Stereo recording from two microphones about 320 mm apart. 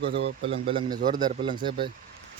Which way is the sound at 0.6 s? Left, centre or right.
Centre.